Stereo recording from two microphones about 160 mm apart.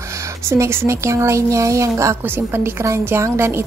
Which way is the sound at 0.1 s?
20° right (ahead or behind).